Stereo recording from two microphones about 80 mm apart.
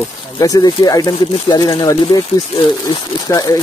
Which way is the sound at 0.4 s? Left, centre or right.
Left.